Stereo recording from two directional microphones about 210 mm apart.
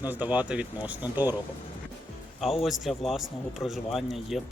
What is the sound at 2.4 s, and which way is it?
Speech, centre (ahead or behind).